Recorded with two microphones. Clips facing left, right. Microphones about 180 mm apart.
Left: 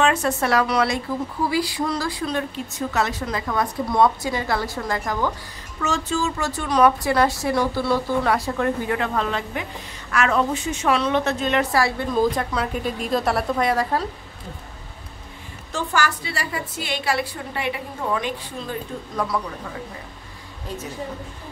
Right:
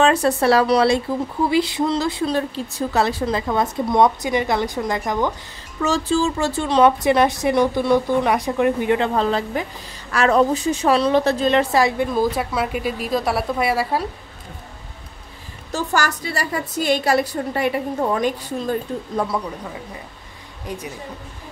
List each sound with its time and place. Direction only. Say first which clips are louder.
0.0 s a woman's voice: right 4 dB; 35° right (ahead or behind); by 5.3 s 20° right (ahead or behind)
5.8 s a woman's voice: right 5 dB; 35° right (ahead or behind)
11.7 s speech: right 4 dB; 20° right (ahead or behind)
12.1 s speech: even; 10° right (ahead or behind)
15.7 s a woman's voice: right 2 dB; 40° right (ahead or behind)
19.1 s speech: right 2 dB; 25° right (ahead or behind)
20.6 s speech: right 2 dB; 15° right (ahead or behind)